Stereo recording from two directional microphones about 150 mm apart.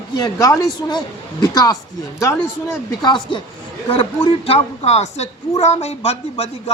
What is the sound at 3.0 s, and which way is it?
A woman's voice, 30° left (ahead or behind).